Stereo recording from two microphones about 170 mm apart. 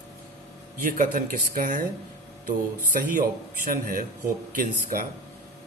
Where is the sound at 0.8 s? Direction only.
50° right (ahead or behind).